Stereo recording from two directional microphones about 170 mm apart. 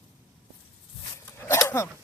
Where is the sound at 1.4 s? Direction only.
15° left (ahead or behind).